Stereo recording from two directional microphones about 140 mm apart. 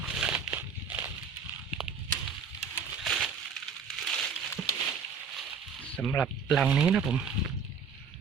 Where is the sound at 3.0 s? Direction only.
Centre (ahead or behind).